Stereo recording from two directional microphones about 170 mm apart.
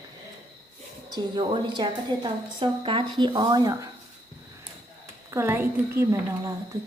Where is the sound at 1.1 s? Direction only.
25° right (ahead or behind).